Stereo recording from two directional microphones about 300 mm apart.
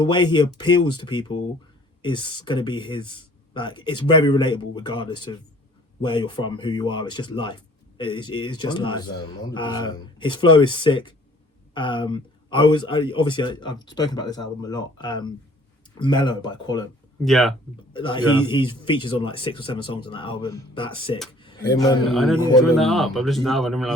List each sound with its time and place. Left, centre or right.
0.0 s speech: centre
17.2 s speech: centre
17.9 s a man's voice: centre
22.1 s speech: centre